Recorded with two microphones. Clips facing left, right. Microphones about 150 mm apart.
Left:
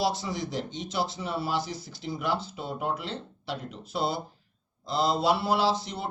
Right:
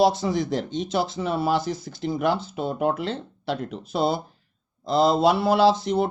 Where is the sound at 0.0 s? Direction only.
55° right (ahead or behind).